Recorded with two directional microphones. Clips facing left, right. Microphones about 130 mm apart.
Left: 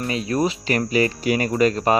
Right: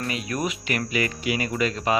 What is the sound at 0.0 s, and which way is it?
Speech, 30° left (ahead or behind).